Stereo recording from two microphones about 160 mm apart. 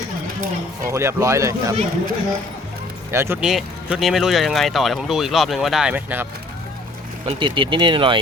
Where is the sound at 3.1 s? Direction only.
15° right (ahead or behind).